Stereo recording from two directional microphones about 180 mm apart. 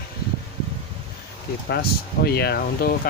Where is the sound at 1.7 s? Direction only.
60° left (ahead or behind).